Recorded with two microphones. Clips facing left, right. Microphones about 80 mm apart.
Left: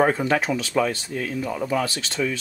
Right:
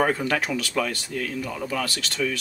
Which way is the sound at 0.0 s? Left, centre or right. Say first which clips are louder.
Left 3 dB; centre.